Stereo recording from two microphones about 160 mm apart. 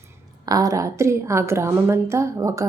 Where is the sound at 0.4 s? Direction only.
20° right (ahead or behind).